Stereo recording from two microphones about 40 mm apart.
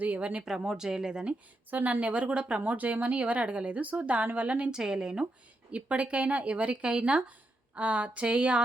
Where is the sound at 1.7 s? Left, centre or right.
Right.